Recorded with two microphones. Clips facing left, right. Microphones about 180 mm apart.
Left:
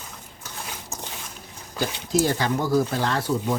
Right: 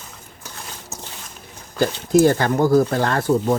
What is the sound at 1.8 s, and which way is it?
Speech, 55° right (ahead or behind).